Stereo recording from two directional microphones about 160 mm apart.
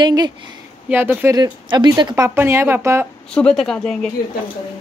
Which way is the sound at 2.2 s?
15° right (ahead or behind).